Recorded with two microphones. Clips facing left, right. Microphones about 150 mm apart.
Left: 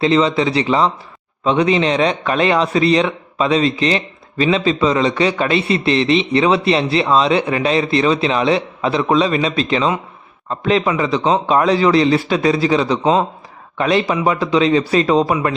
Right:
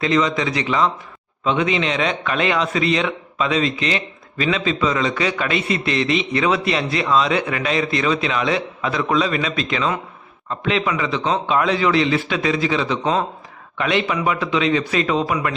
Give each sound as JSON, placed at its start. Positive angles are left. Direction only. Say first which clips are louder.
{"t": 0.0, "sound": "a man's voice", "louder": "left 4 dB", "side_deg": 30}